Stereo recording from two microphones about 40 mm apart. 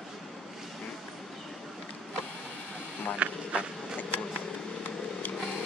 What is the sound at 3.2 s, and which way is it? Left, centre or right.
Insect, right.